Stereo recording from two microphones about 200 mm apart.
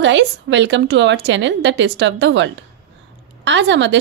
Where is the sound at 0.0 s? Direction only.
65° right (ahead or behind).